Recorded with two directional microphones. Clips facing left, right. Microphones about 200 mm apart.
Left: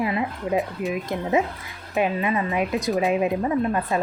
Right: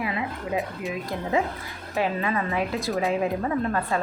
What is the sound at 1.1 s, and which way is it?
A woman's voice, 20° left (ahead or behind).